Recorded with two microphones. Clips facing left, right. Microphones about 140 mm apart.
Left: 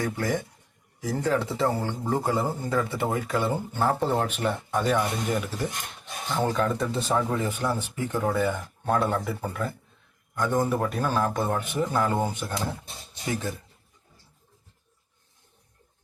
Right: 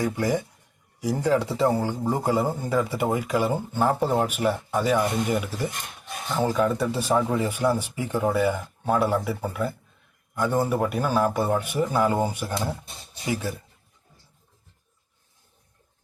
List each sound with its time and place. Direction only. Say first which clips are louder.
0.0 s speech: right 3 dB; 15° right (ahead or behind)